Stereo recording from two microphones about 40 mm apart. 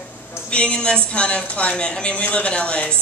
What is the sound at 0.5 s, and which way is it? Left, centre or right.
A woman's voice, left.